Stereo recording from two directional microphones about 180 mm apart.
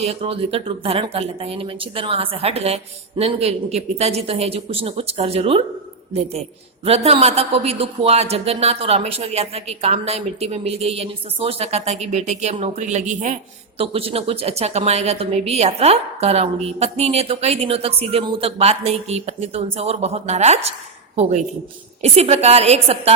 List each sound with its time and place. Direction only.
0.0 s a woman's voice: 35° right (ahead or behind)
6.8 s a woman's voice: 35° right (ahead or behind)
13.7 s a woman's voice: 30° right (ahead or behind)